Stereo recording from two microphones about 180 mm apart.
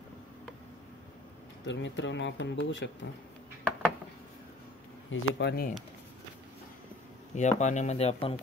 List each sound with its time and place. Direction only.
1.6 s a man's voice: 90° left
5.1 s speech: 65° left (ahead or behind)
7.3 s speech: 40° left (ahead or behind)